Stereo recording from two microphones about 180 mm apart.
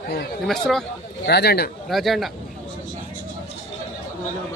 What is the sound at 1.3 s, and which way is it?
Speech, 65° left (ahead or behind).